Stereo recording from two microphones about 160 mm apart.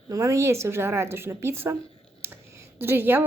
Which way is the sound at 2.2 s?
15° right (ahead or behind).